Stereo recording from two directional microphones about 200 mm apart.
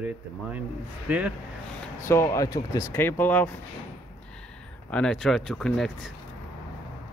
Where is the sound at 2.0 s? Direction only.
15° left (ahead or behind).